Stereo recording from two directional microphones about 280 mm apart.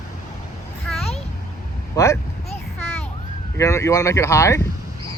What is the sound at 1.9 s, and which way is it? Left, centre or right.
Speech, centre.